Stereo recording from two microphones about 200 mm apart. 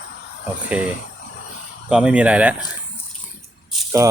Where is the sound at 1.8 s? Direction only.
5° right (ahead or behind).